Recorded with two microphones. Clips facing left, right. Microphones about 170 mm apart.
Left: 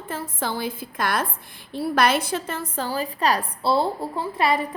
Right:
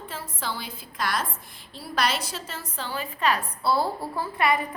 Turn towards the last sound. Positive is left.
turn(degrees=25)  # may be behind; listen again after turning